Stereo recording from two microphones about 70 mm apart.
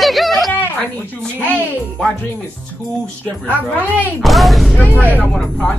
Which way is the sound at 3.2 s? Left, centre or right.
Left.